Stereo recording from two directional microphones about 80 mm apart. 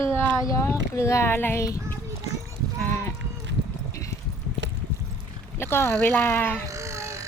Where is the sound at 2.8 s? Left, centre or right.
Left.